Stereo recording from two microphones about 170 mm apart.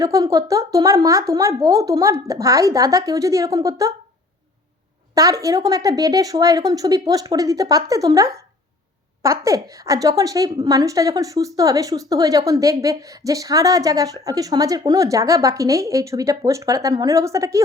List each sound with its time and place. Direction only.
0.0 s a woman's voice: 20° right (ahead or behind)
5.1 s a woman's voice: 20° right (ahead or behind)